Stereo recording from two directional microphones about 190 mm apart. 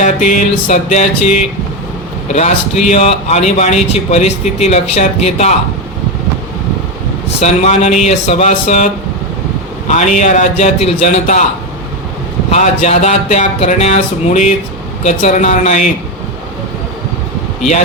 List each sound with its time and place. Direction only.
0.0 s speech: 40° left (ahead or behind)
7.3 s speech: 35° left (ahead or behind)
9.9 s speech: 40° left (ahead or behind)
12.5 s speech: 35° left (ahead or behind)